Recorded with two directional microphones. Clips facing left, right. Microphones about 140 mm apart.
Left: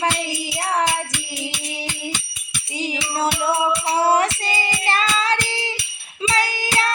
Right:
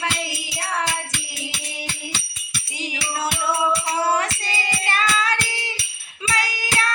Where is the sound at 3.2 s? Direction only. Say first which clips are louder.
Left 3 dB; 25° left (ahead or behind).